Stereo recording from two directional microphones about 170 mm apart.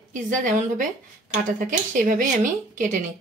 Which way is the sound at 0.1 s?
50° right (ahead or behind).